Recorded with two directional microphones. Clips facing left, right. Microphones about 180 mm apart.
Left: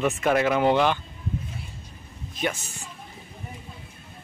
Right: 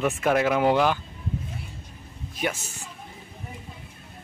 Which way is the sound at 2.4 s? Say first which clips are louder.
Even; 10° right (ahead or behind).